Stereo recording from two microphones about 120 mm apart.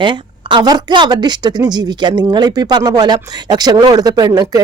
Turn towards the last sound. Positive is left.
turn(degrees=-35)  # may be behind; listen again after turning